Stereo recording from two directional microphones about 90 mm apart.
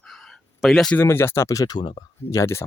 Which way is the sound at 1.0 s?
25° left (ahead or behind).